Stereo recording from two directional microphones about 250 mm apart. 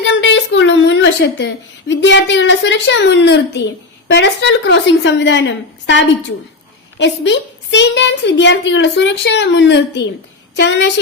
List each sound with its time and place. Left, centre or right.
0.0 s a woman's voice: left